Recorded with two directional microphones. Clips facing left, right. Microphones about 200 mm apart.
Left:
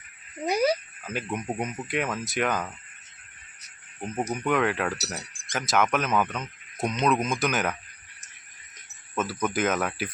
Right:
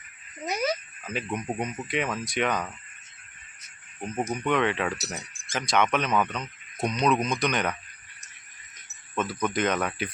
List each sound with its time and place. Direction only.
0.4 s speech: 30° left (ahead or behind)
1.0 s speech: 5° left (ahead or behind)
4.4 s speech: 5° left (ahead or behind)
9.1 s speech: 5° left (ahead or behind)